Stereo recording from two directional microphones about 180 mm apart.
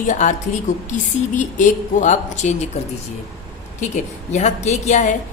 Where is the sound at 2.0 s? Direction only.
40° left (ahead or behind).